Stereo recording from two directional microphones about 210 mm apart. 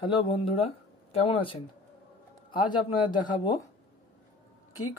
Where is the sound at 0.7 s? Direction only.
30° left (ahead or behind).